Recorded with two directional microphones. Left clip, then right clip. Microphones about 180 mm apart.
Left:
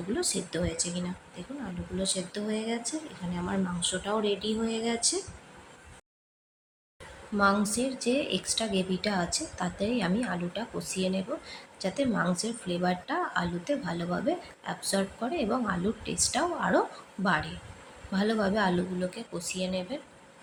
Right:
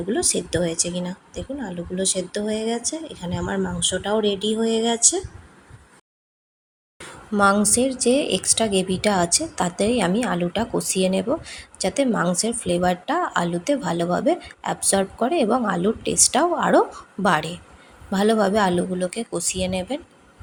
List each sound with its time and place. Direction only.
0.1 s speech: 35° right (ahead or behind)
7.3 s speech: 45° right (ahead or behind)